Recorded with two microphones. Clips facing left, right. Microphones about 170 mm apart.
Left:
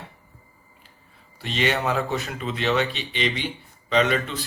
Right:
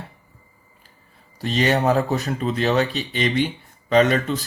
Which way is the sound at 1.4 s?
40° right (ahead or behind).